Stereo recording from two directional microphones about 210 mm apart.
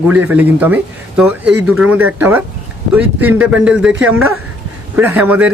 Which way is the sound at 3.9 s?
70° right (ahead or behind).